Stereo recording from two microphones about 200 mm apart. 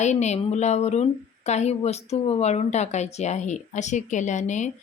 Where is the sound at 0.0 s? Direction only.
35° left (ahead or behind).